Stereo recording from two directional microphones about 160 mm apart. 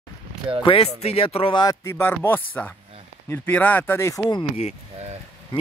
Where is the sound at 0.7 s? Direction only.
35° left (ahead or behind); by 4.2 s 15° left (ahead or behind).